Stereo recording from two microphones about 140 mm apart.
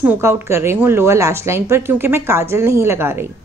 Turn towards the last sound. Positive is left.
turn(degrees=-15)  # may be behind; listen again after turning